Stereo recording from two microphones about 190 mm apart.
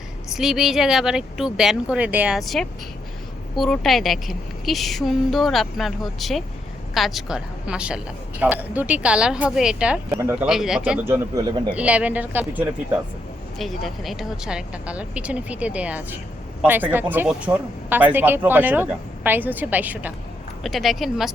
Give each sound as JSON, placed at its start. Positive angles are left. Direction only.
{"t": 0.3, "sound": "a woman's voice", "side_deg": 0}
{"t": 10.1, "sound": "speech", "side_deg": -15}
{"t": 10.4, "sound": "a woman's voice", "side_deg": -5}
{"t": 11.7, "sound": "a woman's voice", "side_deg": -5}